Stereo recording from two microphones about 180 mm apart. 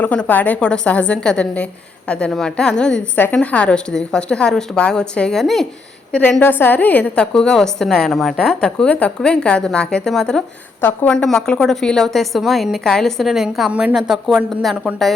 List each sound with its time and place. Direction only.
0.0 s a woman's voice: 10° left (ahead or behind)